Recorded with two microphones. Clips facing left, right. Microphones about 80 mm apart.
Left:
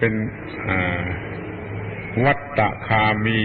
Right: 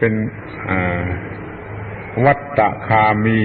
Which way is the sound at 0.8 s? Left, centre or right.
Centre.